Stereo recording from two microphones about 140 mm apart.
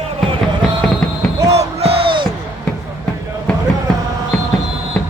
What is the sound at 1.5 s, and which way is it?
Music, 45° right (ahead or behind).